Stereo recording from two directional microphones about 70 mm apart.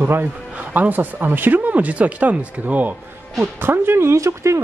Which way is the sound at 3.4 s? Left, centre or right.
Right.